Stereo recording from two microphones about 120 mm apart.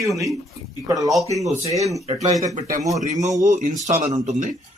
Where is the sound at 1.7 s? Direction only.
25° right (ahead or behind).